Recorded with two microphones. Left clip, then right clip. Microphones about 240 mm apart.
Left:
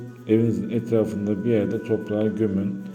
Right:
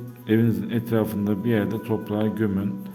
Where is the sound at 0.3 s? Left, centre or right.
Right.